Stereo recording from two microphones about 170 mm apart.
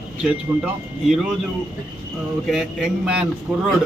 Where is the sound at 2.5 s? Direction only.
5° right (ahead or behind).